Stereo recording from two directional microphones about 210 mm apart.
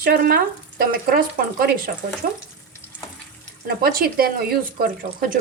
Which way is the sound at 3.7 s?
45° right (ahead or behind).